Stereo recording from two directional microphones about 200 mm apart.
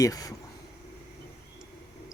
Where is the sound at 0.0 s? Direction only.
15° left (ahead or behind).